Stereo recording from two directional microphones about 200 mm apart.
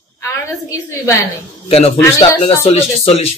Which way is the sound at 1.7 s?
30° left (ahead or behind).